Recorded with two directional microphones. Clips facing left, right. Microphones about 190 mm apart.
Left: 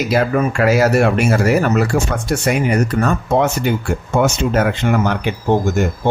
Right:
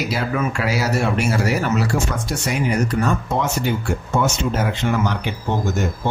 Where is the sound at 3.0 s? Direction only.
60° left (ahead or behind).